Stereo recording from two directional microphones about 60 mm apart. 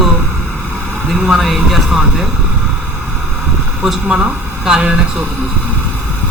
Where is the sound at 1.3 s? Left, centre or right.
Centre.